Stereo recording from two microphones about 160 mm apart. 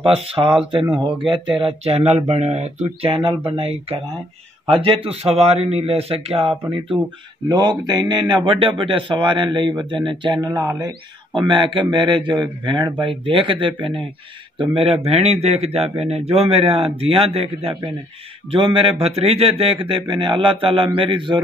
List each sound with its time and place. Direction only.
0.0 s speech: 35° right (ahead or behind)
7.4 s speech: 25° right (ahead or behind)
10.5 s speech: 20° right (ahead or behind)